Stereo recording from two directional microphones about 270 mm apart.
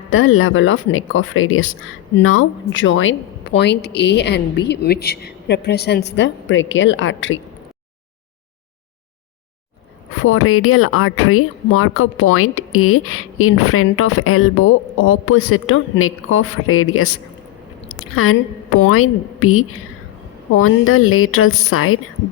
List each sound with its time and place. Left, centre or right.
0.1 s speech: left
10.2 s speech: left
17.8 s squish: left
18.8 s speech: left